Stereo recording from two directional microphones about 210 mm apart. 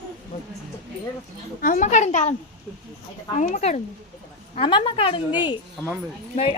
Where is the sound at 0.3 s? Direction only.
30° left (ahead or behind).